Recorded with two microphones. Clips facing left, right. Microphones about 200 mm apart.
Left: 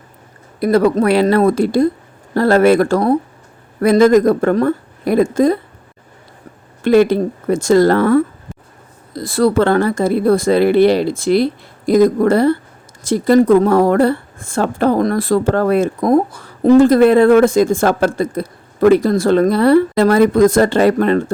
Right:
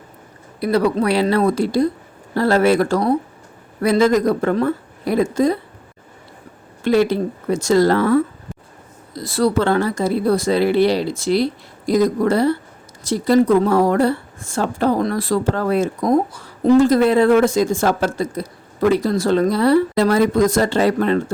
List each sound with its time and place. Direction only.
0.6 s speech: 50° left (ahead or behind)
6.8 s speech: 50° left (ahead or behind)